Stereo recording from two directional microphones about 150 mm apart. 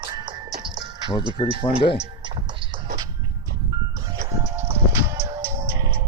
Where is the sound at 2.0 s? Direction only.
30° right (ahead or behind).